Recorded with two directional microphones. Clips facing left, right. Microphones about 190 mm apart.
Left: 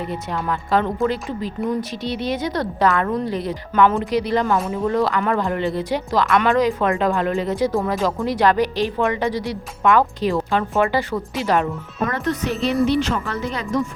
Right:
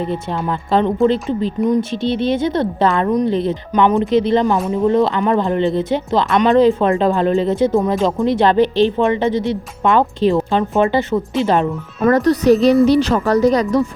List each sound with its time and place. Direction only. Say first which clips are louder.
0.0 s speech: right 5 dB; 25° right (ahead or behind)
12.0 s a woman's voice: right 11 dB; 40° right (ahead or behind)